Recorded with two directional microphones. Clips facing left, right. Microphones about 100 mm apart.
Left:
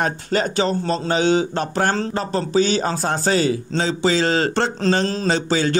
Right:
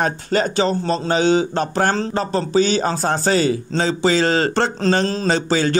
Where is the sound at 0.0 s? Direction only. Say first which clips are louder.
Right 2 dB; 35° right (ahead or behind).